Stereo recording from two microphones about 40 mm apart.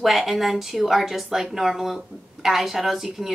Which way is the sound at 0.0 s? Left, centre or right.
Centre.